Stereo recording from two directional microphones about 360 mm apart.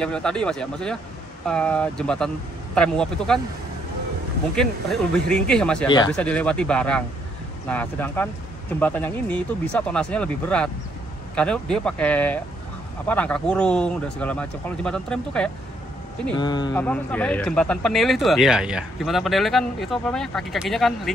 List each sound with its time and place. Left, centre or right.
0.0 s speech: centre
4.6 s speech: centre